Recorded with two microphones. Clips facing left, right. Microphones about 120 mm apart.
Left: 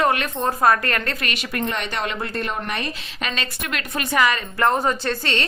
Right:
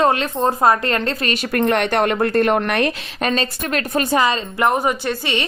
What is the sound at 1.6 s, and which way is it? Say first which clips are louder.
A woman's voice: right 10 dB; 60° right (ahead or behind).